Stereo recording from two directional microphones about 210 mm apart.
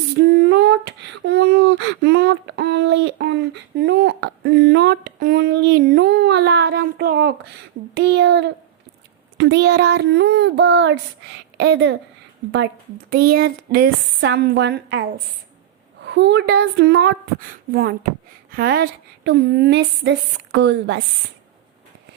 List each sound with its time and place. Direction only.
0.2 s a child's voice: 50° right (ahead or behind)
13.1 s speech: 45° right (ahead or behind)
16.0 s speech: 55° right (ahead or behind)